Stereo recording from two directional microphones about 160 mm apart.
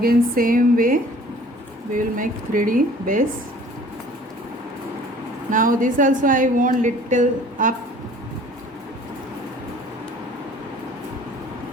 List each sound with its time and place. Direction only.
0.0 s a woman's voice: 65° right (ahead or behind)
5.5 s a woman's voice: 55° right (ahead or behind)